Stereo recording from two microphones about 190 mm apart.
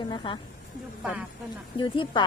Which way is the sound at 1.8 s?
25° left (ahead or behind).